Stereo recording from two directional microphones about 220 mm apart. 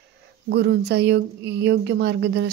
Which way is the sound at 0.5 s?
50° right (ahead or behind).